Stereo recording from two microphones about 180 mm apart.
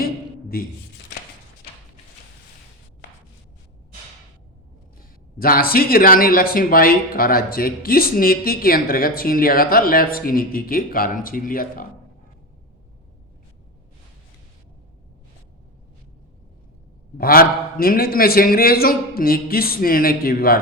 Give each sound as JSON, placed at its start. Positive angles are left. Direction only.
{"t": 0.0, "sound": "a sound", "side_deg": 55}
{"t": 5.4, "sound": "speech", "side_deg": 55}
{"t": 17.2, "sound": "a man's voice", "side_deg": 55}